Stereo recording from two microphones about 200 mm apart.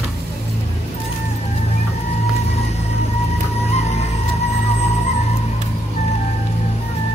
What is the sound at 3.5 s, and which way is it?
Music, 30° left (ahead or behind).